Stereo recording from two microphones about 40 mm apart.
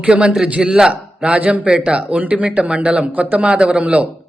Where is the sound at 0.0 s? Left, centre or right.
Right.